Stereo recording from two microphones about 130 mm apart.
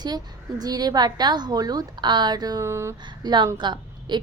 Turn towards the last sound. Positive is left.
turn(degrees=-35)  # may be behind; listen again after turning